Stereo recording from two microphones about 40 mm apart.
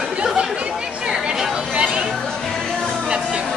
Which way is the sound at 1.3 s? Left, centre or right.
Centre.